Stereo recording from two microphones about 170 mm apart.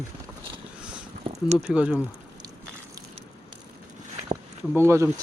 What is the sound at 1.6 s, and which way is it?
Speech, 5° right (ahead or behind).